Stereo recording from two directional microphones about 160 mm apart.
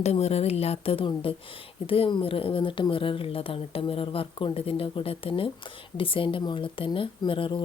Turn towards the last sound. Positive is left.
turn(degrees=30)  # may be behind; listen again after turning